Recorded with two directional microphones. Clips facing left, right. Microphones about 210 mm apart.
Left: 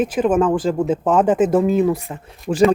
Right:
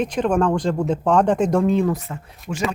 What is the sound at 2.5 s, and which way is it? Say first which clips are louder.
Speech: left 9 dB; 45° left (ahead or behind).